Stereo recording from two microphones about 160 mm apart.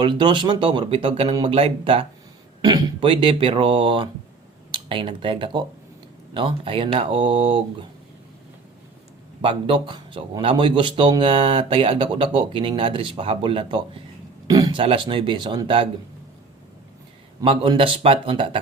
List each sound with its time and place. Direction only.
0.0 s a man's voice: 30° right (ahead or behind)
9.4 s a man's voice: 35° right (ahead or behind)
14.4 s a sound: 25° right (ahead or behind)
14.8 s a man's voice: 30° right (ahead or behind)
17.4 s a man's voice: 35° right (ahead or behind)